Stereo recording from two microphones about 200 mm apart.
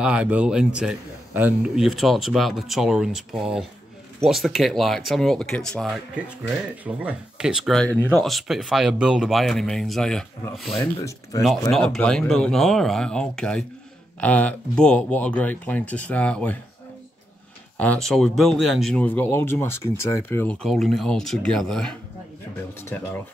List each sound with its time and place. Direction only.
0.0 s speech: 5° right (ahead or behind)
10.8 s speech: 15° left (ahead or behind)
11.7 s speech: 5° left (ahead or behind)
17.7 s speech: 5° left (ahead or behind)